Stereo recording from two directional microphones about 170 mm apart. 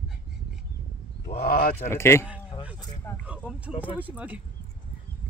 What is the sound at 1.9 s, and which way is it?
Speech, 15° left (ahead or behind).